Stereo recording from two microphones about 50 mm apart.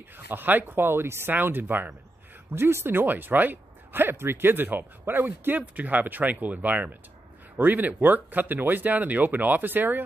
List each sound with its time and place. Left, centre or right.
0.3 s speech: right
1.3 s speech: right
2.5 s speech: right